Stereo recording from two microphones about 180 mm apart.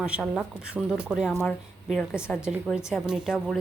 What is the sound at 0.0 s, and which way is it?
A woman's voice, 5° right (ahead or behind).